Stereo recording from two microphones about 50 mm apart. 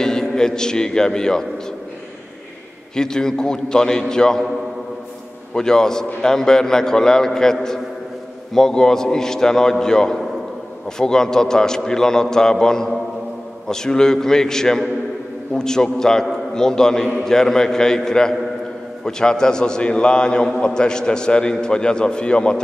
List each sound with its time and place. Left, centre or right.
0.0 s a man's voice: centre
3.0 s a man's voice: centre
5.5 s a man's voice: centre
8.5 s a man's voice: centre